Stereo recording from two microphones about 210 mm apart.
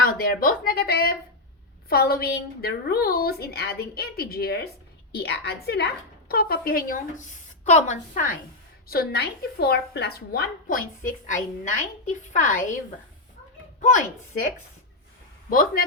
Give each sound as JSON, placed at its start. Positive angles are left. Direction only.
{"t": 0.1, "sound": "speech", "side_deg": 45}
{"t": 15.4, "sound": "speech", "side_deg": 45}